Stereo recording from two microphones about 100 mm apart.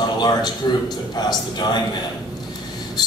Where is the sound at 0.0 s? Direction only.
45° left (ahead or behind).